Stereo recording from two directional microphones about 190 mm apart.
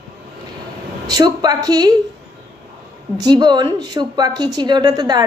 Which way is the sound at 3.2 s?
20° right (ahead or behind).